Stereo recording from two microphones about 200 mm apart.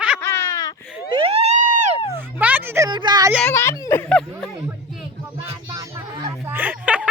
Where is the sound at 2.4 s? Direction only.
10° right (ahead or behind).